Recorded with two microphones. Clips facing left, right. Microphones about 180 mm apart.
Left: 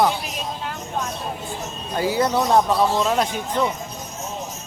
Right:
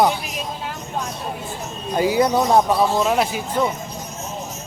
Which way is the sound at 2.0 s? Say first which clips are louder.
Right 3 dB; 15° right (ahead or behind).